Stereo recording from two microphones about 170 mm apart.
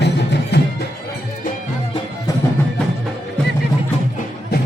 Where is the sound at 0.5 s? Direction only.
80° left.